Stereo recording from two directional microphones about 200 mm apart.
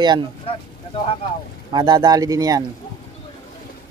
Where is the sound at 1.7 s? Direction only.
20° right (ahead or behind).